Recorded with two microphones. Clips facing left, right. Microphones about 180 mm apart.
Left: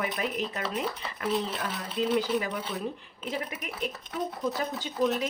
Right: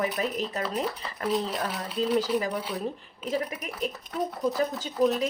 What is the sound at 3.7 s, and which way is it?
Speech, 35° right (ahead or behind).